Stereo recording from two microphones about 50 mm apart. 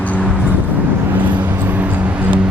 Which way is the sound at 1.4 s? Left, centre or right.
Right.